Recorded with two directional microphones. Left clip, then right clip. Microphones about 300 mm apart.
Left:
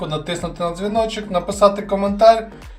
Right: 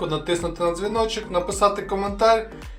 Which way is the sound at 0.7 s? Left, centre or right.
Right.